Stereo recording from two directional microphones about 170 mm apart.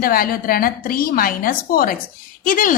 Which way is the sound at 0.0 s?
60° left (ahead or behind).